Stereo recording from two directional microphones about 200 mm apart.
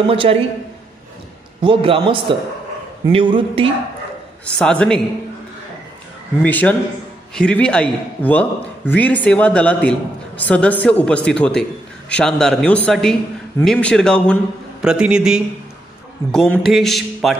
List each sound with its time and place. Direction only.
0.0 s a man's voice: 25° right (ahead or behind)
1.6 s a man's voice: 25° right (ahead or behind)
4.6 s a man's voice: 5° left (ahead or behind)
6.4 s a man's voice: 10° left (ahead or behind)